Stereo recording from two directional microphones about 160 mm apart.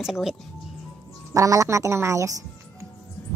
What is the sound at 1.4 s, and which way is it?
Speech, 20° right (ahead or behind).